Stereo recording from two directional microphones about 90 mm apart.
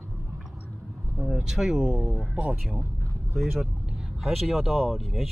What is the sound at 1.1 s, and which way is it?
Speech, 5° right (ahead or behind).